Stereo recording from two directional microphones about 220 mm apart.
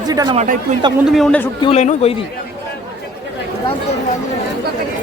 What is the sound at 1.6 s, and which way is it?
Speech, 30° left (ahead or behind).